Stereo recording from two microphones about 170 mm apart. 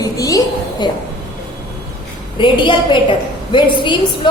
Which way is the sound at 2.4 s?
30° left (ahead or behind).